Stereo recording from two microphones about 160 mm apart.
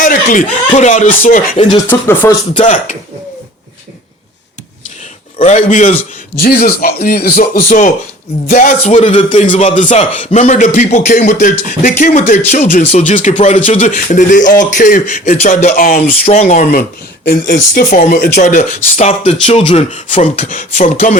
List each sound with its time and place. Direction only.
0.0 s speech: 55° left (ahead or behind)
1.9 s speech: 15° left (ahead or behind)
5.4 s a man's voice: 45° left (ahead or behind)
6.4 s speech: 65° left (ahead or behind)
7.7 s a man's voice: 55° left (ahead or behind)
16.2 s a man's voice: 45° left (ahead or behind)
17.2 s a man's voice: 60° left (ahead or behind)